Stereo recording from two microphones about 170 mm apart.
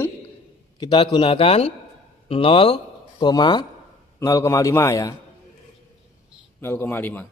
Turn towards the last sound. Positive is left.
turn(degrees=10)  # may be behind; listen again after turning